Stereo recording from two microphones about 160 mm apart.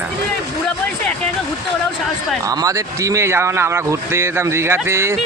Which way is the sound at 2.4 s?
20° right (ahead or behind).